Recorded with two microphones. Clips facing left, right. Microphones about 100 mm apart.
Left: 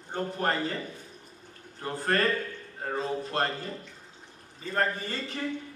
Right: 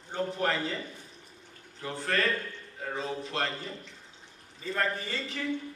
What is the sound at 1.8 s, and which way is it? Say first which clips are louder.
A man's voice: left 3 dB; 45° left (ahead or behind).